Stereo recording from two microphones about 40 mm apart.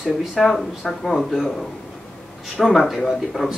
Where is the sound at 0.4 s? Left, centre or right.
Centre.